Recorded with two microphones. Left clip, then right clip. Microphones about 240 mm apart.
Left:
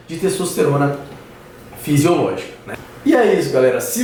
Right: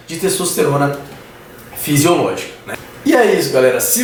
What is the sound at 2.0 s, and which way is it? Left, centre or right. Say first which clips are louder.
A man's voice: right 2 dB; centre.